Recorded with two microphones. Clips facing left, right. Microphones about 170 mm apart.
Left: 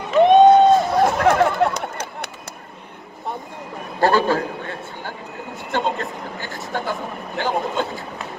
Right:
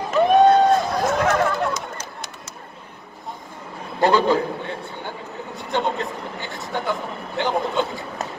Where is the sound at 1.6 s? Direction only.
65° left (ahead or behind).